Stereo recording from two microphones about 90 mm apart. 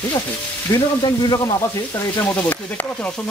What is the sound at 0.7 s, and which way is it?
Speech, 45° left (ahead or behind).